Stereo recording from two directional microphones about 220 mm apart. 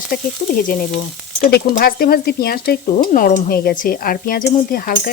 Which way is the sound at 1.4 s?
45° left (ahead or behind).